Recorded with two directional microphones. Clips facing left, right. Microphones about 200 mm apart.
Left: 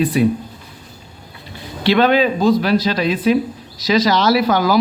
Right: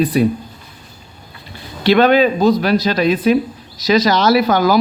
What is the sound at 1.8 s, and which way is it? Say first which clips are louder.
A man's voice: right 3 dB; 45° right (ahead or behind).